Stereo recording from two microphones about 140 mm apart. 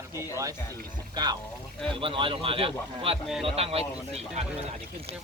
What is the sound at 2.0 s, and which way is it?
A man's voice, 40° right (ahead or behind).